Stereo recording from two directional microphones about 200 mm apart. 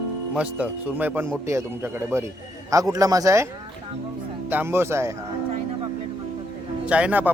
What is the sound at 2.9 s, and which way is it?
Speech, 20° right (ahead or behind).